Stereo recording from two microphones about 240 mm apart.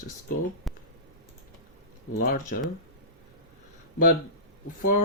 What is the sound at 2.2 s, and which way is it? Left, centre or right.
Speech, left.